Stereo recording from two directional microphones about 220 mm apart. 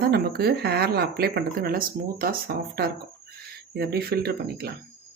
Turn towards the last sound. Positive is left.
turn(degrees=-45)  # may be behind; listen again after turning